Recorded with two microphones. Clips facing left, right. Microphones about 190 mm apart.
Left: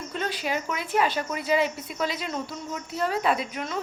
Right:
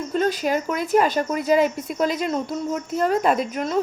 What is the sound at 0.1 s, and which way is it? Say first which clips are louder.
Speech: right 8 dB; 40° right (ahead or behind).